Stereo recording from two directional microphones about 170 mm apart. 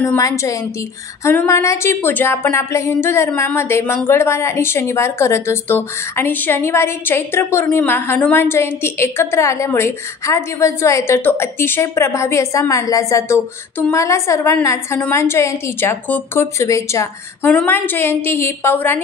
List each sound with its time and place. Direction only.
0.0 s a woman's voice: 20° left (ahead or behind)